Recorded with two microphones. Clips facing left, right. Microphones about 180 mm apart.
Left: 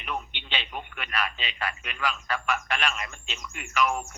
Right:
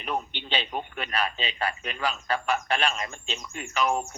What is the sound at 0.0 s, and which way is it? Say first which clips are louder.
A man's voice: right 4 dB; 35° right (ahead or behind).